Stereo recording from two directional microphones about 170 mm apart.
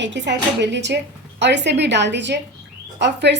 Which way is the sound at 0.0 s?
90° right.